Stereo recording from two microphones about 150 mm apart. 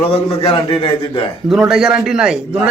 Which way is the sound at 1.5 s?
5° right (ahead or behind).